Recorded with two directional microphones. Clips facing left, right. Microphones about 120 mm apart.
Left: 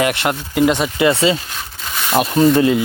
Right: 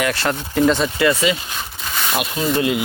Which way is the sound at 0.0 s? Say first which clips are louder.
Left 3 dB; 20° left (ahead or behind).